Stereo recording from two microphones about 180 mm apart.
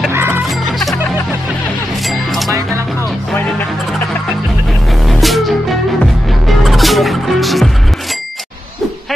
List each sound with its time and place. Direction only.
0.1 s music: 15° right (ahead or behind)
2.0 s music: centre (ahead or behind)
5.0 s music: centre (ahead or behind)